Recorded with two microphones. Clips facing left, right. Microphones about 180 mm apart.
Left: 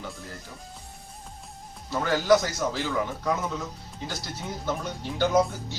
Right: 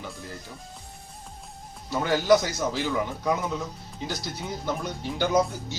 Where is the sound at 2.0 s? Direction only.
15° right (ahead or behind).